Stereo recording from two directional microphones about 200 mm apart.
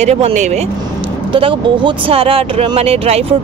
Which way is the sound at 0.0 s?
35° right (ahead or behind).